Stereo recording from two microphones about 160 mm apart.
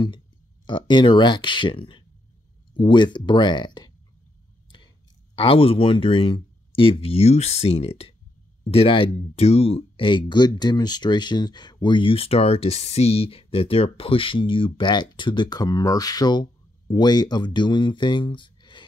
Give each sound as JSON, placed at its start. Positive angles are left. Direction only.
{"t": 0.7, "sound": "speech", "side_deg": 30}
{"t": 5.3, "sound": "speech", "side_deg": 35}